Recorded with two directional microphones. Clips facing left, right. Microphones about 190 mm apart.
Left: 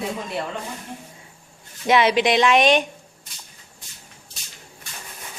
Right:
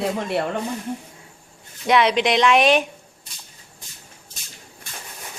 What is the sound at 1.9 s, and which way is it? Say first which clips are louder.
Speech: even; centre (ahead or behind).